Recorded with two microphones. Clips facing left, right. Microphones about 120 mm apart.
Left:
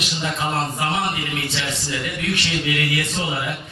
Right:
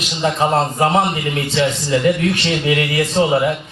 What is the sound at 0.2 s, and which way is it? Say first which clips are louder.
A man's voice: right 9 dB; 35° right (ahead or behind).